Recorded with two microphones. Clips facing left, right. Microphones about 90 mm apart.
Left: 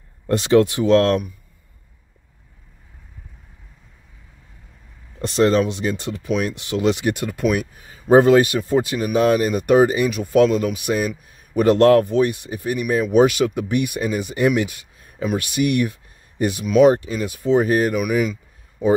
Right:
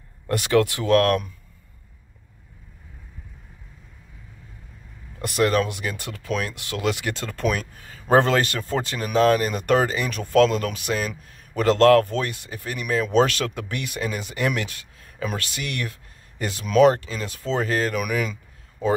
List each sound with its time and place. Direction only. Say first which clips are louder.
0.3 s speech: left 5 dB; 25° left (ahead or behind)
5.2 s speech: left 4 dB; 25° left (ahead or behind)